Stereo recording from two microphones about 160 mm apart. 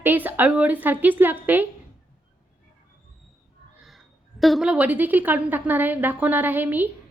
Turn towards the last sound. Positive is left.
turn(degrees=-10)  # may be behind; listen again after turning